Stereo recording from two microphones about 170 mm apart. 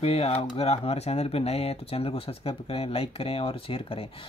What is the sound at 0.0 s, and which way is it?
Speech, 35° left (ahead or behind).